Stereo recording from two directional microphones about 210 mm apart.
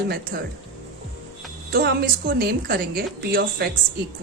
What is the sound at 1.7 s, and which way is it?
A woman's voice, 45° right (ahead or behind).